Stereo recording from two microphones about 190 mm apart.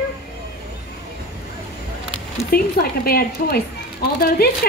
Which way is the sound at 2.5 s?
55° left (ahead or behind).